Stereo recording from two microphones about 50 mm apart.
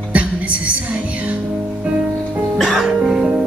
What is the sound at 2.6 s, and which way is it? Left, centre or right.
Music, centre.